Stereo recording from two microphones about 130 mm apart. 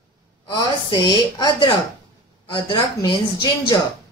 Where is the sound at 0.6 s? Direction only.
30° left (ahead or behind).